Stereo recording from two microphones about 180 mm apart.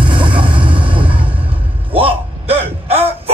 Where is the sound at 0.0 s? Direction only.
25° right (ahead or behind).